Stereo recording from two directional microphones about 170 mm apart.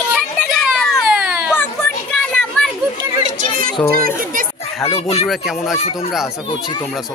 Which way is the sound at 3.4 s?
55° right (ahead or behind).